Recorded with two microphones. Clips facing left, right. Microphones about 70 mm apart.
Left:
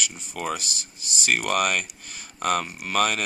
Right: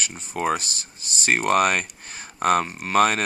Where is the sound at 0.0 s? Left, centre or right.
Right.